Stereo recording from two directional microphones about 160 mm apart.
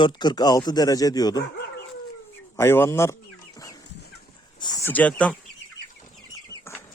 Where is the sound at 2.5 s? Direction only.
15° left (ahead or behind).